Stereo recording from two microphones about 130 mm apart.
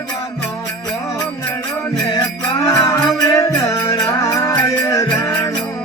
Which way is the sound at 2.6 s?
25° left (ahead or behind).